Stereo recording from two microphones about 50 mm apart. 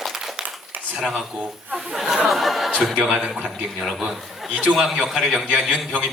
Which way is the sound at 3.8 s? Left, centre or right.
Centre.